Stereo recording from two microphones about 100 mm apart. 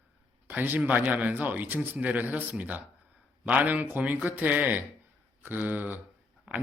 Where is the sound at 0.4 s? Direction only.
20° right (ahead or behind).